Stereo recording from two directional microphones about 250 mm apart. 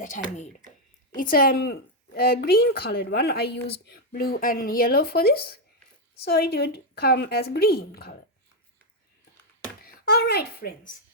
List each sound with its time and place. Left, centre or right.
0.0 s speech: left
9.8 s speech: left